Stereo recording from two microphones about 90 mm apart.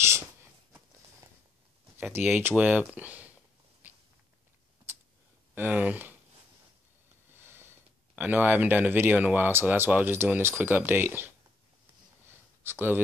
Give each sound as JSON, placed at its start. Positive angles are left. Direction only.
{"t": 2.1, "sound": "speech", "side_deg": -25}
{"t": 3.8, "sound": "walk", "side_deg": -20}
{"t": 5.5, "sound": "speech", "side_deg": -20}
{"t": 7.3, "sound": "sniff", "side_deg": -25}
{"t": 8.2, "sound": "speech", "side_deg": -20}
{"t": 12.3, "sound": "a sound", "side_deg": -25}